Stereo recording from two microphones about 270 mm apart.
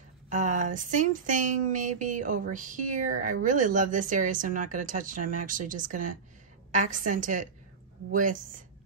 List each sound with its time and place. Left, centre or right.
0.3 s a woman's voice: right